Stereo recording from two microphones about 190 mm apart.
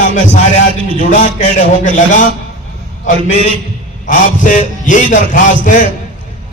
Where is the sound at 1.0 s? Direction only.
45° left (ahead or behind).